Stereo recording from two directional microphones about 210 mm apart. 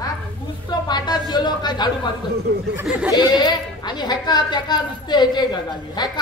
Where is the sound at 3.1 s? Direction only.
20° left (ahead or behind).